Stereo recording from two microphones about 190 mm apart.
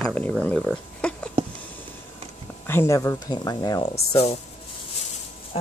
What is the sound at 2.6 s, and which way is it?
Speech, 15° left (ahead or behind).